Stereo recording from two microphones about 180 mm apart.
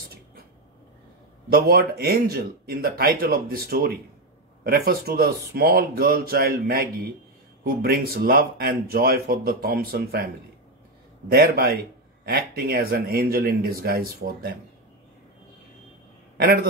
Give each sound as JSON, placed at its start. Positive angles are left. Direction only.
{"t": 1.5, "sound": "speech", "side_deg": -55}